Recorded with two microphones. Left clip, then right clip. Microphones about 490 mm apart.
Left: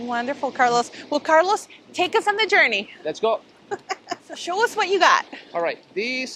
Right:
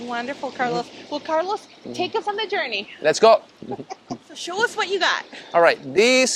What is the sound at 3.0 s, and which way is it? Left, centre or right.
Speech, right.